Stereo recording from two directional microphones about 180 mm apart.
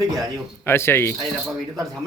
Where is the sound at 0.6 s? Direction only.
15° left (ahead or behind).